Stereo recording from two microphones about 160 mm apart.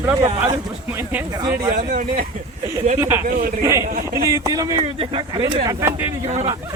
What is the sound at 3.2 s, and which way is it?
Speech, 60° right (ahead or behind).